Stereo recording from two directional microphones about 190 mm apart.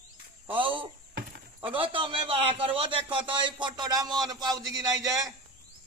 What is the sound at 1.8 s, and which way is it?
Speech, 25° right (ahead or behind).